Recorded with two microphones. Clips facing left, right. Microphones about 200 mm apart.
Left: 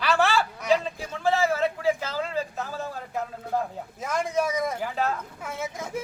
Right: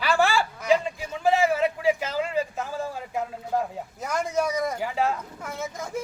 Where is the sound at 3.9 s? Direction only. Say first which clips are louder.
Even; centre (ahead or behind).